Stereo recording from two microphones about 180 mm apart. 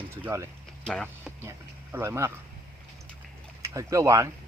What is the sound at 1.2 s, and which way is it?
Speech, 15° right (ahead or behind).